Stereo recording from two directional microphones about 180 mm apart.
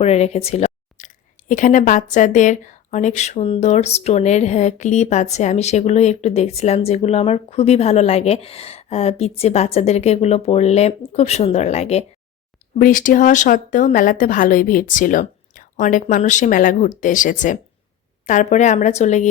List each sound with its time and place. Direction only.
0.0 s speech: 35° left (ahead or behind)
12.8 s a woman's voice: 50° left (ahead or behind)